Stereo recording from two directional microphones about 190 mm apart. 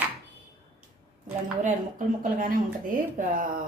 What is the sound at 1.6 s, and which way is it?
Speech, 40° right (ahead or behind).